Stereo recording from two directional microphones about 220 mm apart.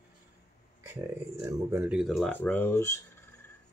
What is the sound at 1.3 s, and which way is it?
Speech, 10° right (ahead or behind).